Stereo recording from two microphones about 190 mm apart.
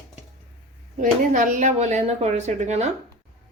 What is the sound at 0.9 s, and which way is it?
Speech, 40° right (ahead or behind).